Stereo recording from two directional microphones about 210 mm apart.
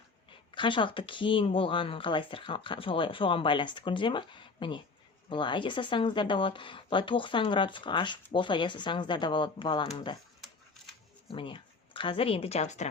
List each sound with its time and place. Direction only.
0.5 s a woman's voice: 25° left (ahead or behind)
11.3 s speech: 25° left (ahead or behind)